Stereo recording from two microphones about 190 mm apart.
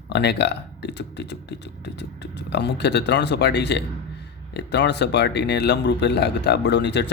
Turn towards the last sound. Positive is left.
turn(degrees=65)  # may be behind; listen again after turning